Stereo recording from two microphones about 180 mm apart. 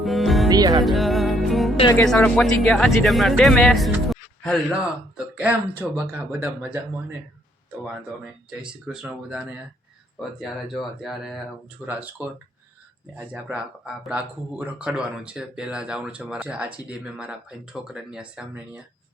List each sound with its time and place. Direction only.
0.0 s music: centre (ahead or behind)
0.4 s music: 20° right (ahead or behind)
0.8 s music: centre (ahead or behind)
2.0 s speech: 5° left (ahead or behind)
7.9 s speech: 5° right (ahead or behind)